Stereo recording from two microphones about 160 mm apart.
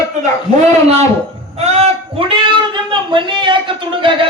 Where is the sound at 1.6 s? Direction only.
40° right (ahead or behind).